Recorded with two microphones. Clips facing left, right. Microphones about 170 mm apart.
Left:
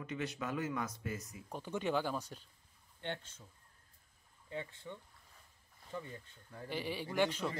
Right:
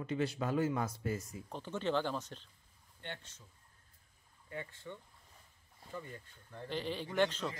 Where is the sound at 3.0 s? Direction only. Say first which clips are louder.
Left 5 dB; 55° left (ahead or behind).